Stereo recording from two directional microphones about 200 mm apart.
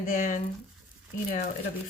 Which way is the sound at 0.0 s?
40° left (ahead or behind).